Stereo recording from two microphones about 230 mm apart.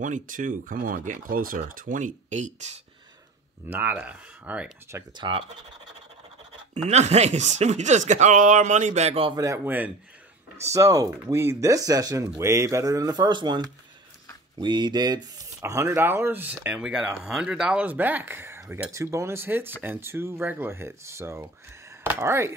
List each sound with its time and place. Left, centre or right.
0.0 s speech: right
3.7 s speech: centre
5.1 s speech: centre
6.7 s speech: right; by 22.5 s centre